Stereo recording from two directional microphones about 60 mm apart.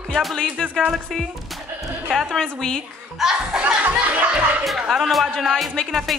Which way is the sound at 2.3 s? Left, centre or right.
Centre.